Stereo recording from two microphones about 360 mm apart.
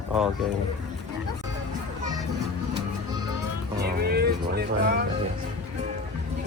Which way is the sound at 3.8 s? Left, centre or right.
Right.